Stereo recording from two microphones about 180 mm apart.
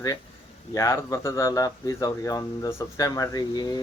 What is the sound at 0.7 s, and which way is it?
Speech, 20° left (ahead or behind).